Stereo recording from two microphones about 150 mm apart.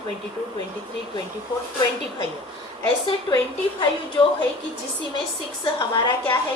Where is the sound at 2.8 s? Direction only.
30° left (ahead or behind).